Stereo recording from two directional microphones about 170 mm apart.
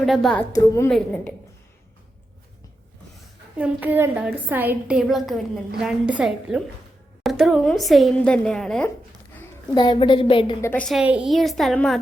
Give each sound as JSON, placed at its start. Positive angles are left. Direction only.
{"t": 0.0, "sound": "a woman's voice", "side_deg": 0}
{"t": 0.5, "sound": "a woman's voice", "side_deg": 20}
{"t": 0.9, "sound": "a woman's voice", "side_deg": 5}
{"t": 3.6, "sound": "a woman's voice", "side_deg": -10}
{"t": 9.7, "sound": "a woman's voice", "side_deg": 25}
{"t": 10.6, "sound": "a woman's voice", "side_deg": 10}
{"t": 10.8, "sound": "a woman's voice", "side_deg": -5}